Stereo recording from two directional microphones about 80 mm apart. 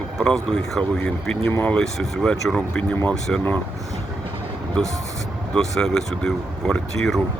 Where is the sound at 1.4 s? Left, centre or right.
Left.